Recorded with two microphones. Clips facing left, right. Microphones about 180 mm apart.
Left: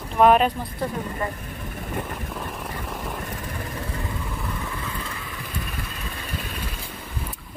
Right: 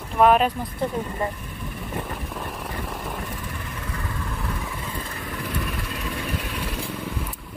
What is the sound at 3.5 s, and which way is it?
Vehicle, 35° left (ahead or behind).